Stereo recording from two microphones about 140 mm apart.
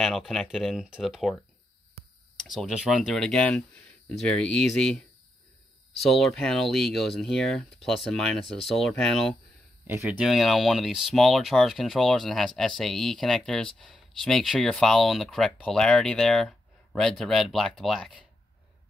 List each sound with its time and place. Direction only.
0.0 s speech: centre (ahead or behind)
5.9 s speech: centre (ahead or behind)
9.8 s speech: 15° right (ahead or behind)
10.1 s speech: centre (ahead or behind)